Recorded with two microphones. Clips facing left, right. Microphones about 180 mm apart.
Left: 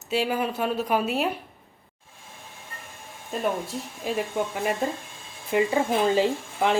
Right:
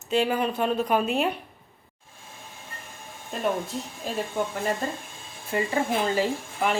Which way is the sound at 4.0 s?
10° left (ahead or behind).